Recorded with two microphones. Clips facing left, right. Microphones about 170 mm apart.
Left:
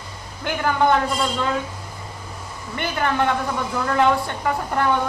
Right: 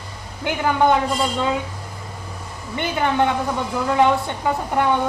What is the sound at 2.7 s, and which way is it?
Speech, 20° right (ahead or behind).